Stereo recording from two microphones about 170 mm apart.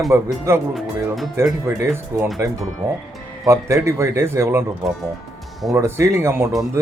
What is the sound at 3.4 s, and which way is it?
A man's voice, 15° right (ahead or behind).